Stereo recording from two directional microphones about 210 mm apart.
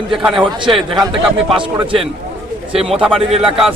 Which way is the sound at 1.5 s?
25° right (ahead or behind).